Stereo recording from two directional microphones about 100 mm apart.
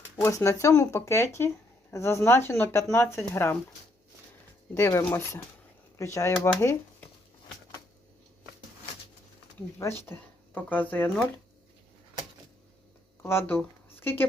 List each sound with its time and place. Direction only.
0.2 s speech: 30° left (ahead or behind)
4.7 s speech: 30° left (ahead or behind)
10.1 s speech: 15° left (ahead or behind)
13.2 s speech: 25° left (ahead or behind)